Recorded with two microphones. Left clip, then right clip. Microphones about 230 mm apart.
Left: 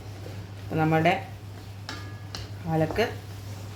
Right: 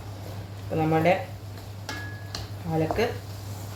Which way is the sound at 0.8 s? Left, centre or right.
Left.